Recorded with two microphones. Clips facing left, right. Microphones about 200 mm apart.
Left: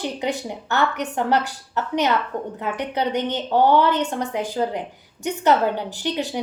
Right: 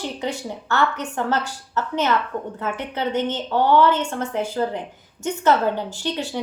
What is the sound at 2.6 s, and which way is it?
A woman's voice, 15° left (ahead or behind).